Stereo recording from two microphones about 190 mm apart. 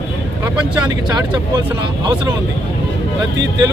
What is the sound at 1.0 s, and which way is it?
Speech, 20° right (ahead or behind).